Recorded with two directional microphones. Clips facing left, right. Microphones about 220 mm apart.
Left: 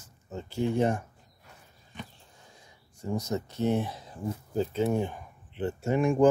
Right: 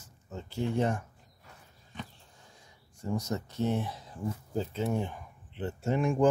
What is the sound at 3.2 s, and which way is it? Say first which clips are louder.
Speech: left 3 dB; 25° left (ahead or behind).